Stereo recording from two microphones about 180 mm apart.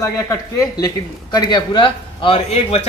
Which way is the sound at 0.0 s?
20° left (ahead or behind).